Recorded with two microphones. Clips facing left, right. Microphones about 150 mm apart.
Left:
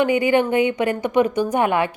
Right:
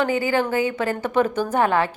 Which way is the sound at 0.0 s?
20° left (ahead or behind).